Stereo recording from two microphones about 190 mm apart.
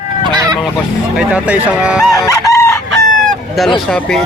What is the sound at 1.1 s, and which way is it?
Speech, 5° right (ahead or behind).